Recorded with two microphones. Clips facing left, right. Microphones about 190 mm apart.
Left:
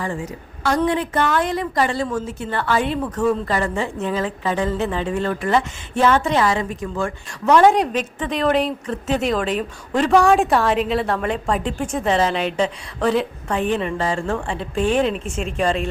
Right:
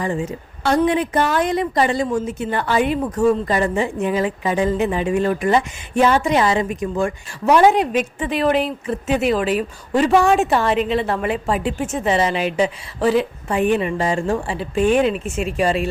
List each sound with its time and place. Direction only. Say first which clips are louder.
0.0 s a woman's voice: right 4 dB; 20° right (ahead or behind)